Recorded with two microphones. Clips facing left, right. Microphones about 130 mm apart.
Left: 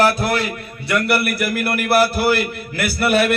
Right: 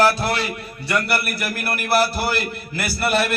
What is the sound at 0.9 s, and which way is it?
A man's voice, 60° left (ahead or behind).